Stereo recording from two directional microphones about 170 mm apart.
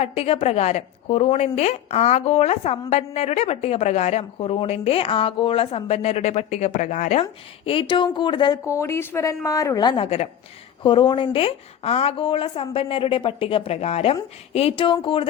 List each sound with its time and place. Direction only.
0.0 s speech: 35° left (ahead or behind)